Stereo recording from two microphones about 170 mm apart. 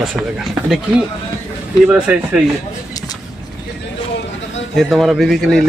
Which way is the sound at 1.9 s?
10° right (ahead or behind).